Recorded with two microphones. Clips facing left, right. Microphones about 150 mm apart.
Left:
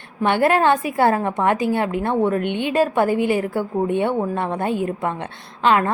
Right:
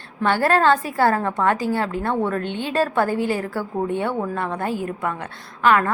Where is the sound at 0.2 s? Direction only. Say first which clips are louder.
Left 1 dB; 20° left (ahead or behind).